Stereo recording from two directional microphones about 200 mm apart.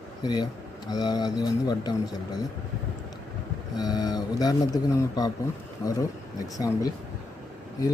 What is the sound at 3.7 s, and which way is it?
Speech, 20° left (ahead or behind).